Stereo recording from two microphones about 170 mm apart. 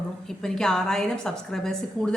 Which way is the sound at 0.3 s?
5° left (ahead or behind).